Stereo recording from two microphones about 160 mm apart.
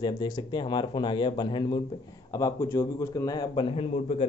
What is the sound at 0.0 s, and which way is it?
A man's voice, 25° left (ahead or behind).